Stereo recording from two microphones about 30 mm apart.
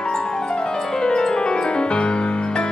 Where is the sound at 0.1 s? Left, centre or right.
Left.